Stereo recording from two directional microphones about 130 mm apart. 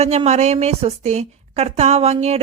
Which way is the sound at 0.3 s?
60° right (ahead or behind).